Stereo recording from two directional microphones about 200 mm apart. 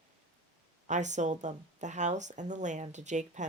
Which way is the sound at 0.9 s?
35° right (ahead or behind).